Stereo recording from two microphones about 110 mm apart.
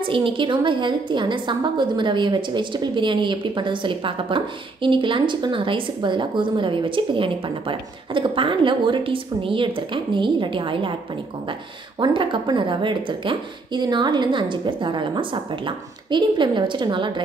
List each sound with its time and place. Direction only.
0.0 s a woman's voice: 50° right (ahead or behind)
12.0 s a woman's voice: 45° right (ahead or behind)